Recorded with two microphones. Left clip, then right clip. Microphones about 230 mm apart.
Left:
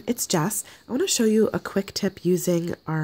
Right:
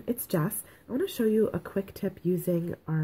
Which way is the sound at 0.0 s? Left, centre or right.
Left.